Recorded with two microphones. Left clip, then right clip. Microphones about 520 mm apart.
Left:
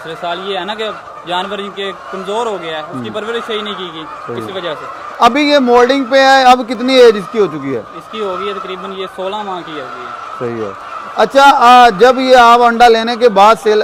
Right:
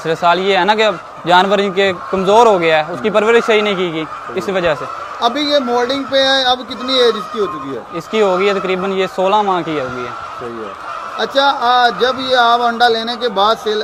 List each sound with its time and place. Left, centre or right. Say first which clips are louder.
0.1 s a man's voice: right 7 dB; right
5.2 s speech: left 5 dB; left
8.1 s a man's voice: right 6 dB; right
11.2 s a man's voice: left 7 dB; left